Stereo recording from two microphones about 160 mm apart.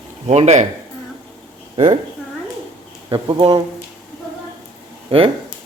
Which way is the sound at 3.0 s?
30° right (ahead or behind).